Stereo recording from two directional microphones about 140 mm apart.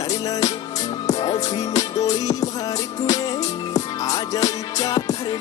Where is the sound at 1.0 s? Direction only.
25° left (ahead or behind).